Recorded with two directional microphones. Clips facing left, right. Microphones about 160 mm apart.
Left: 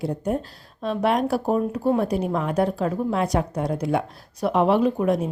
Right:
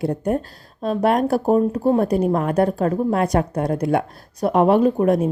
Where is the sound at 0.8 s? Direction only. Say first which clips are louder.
Right 3 dB; 45° right (ahead or behind).